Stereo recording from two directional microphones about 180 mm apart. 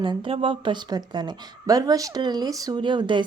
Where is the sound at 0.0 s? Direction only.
30° right (ahead or behind).